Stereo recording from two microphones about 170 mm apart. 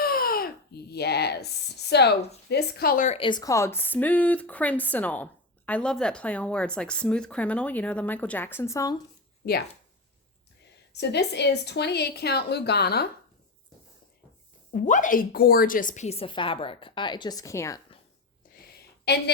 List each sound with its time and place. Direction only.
0.0 s a sound: 60° left (ahead or behind); by 2.1 s 80° left
2.5 s speech: 70° left (ahead or behind); by 3.2 s 50° left (ahead or behind)
3.2 s speech: 25° left (ahead or behind)
10.9 s a woman's voice: 80° left
14.7 s a woman's voice: 50° left (ahead or behind); by 17.7 s 15° left (ahead or behind)
19.1 s a woman's voice: 70° left (ahead or behind)